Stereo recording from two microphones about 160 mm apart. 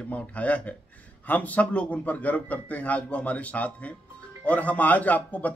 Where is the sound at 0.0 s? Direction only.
10° left (ahead or behind).